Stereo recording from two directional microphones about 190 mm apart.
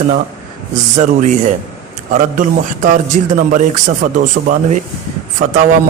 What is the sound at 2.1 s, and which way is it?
A man's voice, 45° right (ahead or behind).